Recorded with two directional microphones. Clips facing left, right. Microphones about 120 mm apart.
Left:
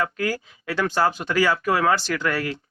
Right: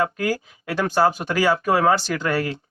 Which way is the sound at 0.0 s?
20° right (ahead or behind).